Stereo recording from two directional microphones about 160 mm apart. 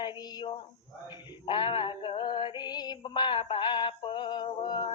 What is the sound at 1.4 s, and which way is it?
Mantra, 30° left (ahead or behind).